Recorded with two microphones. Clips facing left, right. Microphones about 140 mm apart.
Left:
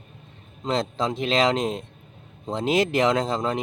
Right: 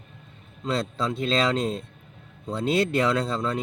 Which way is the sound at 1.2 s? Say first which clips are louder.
Left 2 dB; 90° left.